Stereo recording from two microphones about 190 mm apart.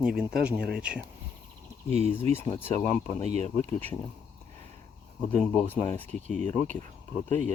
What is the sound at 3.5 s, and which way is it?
Speech, 10° left (ahead or behind).